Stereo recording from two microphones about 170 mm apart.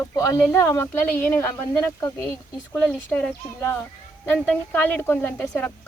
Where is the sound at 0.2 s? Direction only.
20° left (ahead or behind).